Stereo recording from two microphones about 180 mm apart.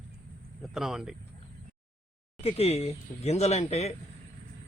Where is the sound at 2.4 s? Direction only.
35° left (ahead or behind).